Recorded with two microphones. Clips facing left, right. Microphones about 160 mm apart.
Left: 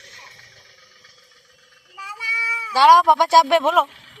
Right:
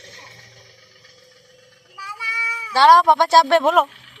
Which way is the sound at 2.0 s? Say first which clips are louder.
Right 1 dB; 5° left (ahead or behind).